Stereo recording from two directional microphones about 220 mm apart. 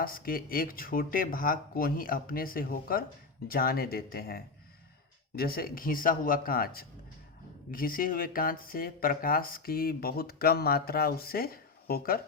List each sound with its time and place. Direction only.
0.0 s speech: 40° left (ahead or behind)